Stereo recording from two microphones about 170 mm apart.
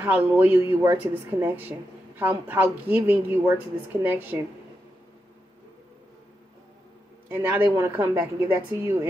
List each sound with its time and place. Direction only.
0.0 s speech: 10° right (ahead or behind)
7.2 s speech: 10° right (ahead or behind)